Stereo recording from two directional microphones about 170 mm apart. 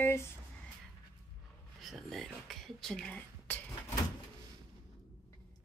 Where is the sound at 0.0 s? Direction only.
15° left (ahead or behind).